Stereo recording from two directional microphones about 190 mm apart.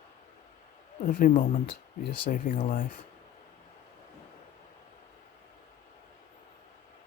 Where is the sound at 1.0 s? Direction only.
45° left (ahead or behind).